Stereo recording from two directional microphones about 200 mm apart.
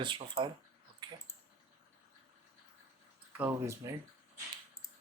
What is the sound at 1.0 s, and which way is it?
Typing, 20° right (ahead or behind).